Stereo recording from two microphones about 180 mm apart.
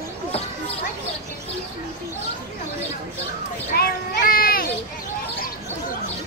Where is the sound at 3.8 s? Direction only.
55° left (ahead or behind).